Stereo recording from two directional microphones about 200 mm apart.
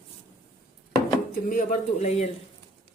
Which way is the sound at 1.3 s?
45° left (ahead or behind).